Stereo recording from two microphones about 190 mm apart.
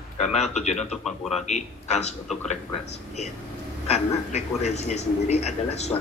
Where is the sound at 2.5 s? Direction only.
35° left (ahead or behind).